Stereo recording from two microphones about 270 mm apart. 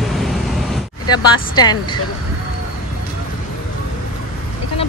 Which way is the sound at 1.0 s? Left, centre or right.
Centre.